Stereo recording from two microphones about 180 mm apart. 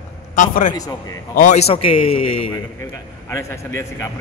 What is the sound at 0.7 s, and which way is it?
Speech, 20° left (ahead or behind).